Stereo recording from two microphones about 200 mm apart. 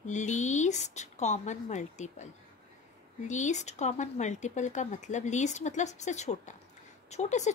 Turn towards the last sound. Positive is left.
turn(degrees=35)  # may be behind; listen again after turning